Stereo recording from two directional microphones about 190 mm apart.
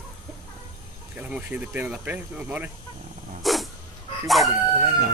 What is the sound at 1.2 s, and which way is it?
Speech, 5° right (ahead or behind).